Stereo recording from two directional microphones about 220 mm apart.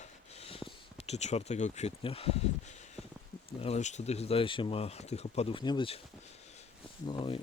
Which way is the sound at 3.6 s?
30° left (ahead or behind).